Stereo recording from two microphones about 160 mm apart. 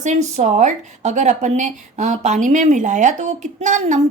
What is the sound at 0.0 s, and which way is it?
A woman's voice, 45° right (ahead or behind).